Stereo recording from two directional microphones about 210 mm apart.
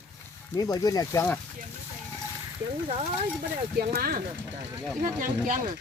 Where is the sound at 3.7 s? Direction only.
45° right (ahead or behind).